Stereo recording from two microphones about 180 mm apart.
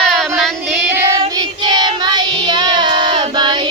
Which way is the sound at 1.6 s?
25° right (ahead or behind).